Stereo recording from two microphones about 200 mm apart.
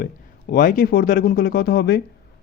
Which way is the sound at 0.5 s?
45° left (ahead or behind).